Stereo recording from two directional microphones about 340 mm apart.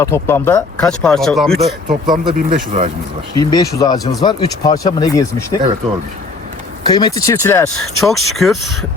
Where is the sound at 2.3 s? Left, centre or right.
Right.